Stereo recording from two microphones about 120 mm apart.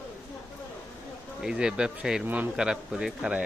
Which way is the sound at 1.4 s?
5° right (ahead or behind).